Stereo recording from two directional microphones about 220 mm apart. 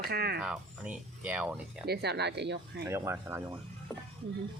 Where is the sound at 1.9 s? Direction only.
50° right (ahead or behind).